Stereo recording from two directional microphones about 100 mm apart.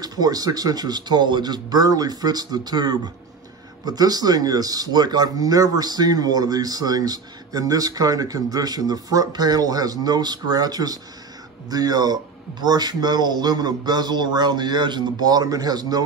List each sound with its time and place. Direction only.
0.0 s speech: 40° right (ahead or behind)